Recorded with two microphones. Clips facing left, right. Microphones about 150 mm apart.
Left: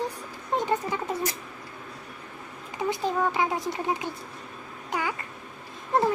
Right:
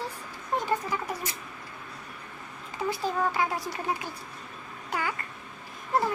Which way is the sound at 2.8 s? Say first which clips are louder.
Left 2 dB; 20° left (ahead or behind).